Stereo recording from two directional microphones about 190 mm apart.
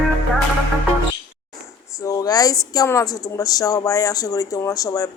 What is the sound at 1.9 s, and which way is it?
A woman's voice, 20° left (ahead or behind).